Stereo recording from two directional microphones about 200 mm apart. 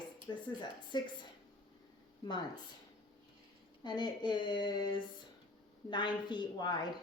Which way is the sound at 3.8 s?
20° left (ahead or behind).